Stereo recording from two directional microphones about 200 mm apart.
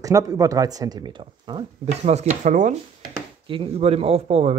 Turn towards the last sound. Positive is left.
turn(degrees=-30)  # may be behind; listen again after turning